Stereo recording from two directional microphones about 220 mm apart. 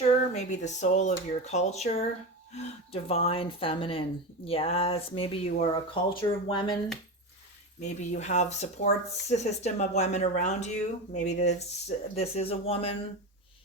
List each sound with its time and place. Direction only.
0.3 s speech: 30° left (ahead or behind)
7.8 s speech: 30° left (ahead or behind)